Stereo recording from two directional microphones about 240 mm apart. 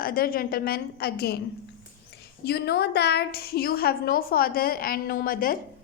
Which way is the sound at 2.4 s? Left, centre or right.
Left.